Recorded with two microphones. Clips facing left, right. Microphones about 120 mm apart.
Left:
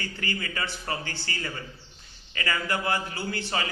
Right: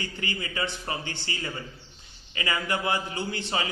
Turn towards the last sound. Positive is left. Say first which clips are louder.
# right 1 dB
turn(degrees=-20)  # may be behind; listen again after turning